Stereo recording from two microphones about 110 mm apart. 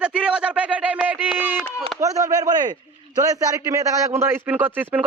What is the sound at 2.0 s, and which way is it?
A man's voice, 30° right (ahead or behind).